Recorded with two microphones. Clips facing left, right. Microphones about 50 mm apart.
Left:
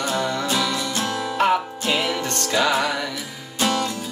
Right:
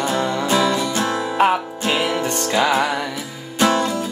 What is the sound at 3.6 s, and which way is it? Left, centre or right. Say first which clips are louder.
Music: right 5 dB; right.